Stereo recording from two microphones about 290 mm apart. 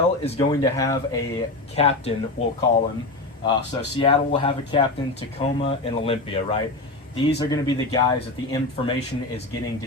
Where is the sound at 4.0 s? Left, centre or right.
Centre.